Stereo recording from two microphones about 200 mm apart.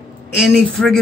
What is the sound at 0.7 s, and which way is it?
Speech, centre (ahead or behind).